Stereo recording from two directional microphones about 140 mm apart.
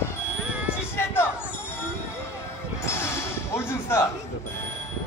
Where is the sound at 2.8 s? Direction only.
20° left (ahead or behind).